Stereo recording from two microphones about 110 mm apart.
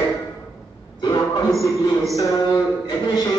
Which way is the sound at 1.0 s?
40° left (ahead or behind).